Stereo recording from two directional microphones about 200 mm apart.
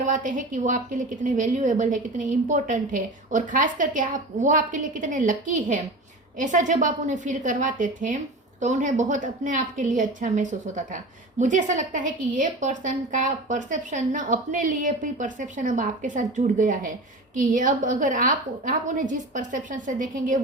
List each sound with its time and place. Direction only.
0.0 s a woman's voice: 40° right (ahead or behind)